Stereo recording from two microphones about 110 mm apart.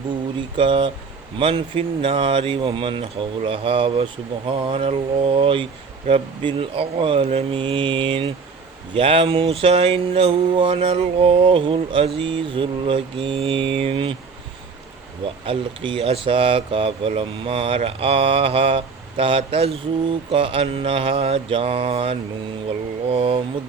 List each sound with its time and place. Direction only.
0.5 s speech: 50° right (ahead or behind)
7.3 s mantra: 70° right (ahead or behind)
7.6 s speech: 50° right (ahead or behind)
9.0 s mantra: 55° right (ahead or behind)
15.4 s speech: 55° right (ahead or behind)
17.2 s mantra: 55° right (ahead or behind)